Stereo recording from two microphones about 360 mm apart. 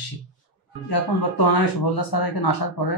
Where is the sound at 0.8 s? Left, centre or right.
Left.